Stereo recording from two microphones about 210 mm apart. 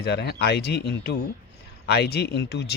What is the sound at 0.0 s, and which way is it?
A man's voice, 50° left (ahead or behind).